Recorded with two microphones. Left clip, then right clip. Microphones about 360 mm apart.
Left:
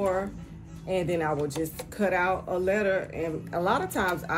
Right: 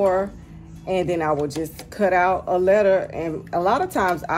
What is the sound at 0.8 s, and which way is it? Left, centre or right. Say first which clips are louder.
Speech: right 6 dB; centre.